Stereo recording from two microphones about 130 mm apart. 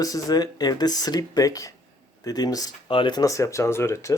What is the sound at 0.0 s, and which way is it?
Speech, 30° left (ahead or behind).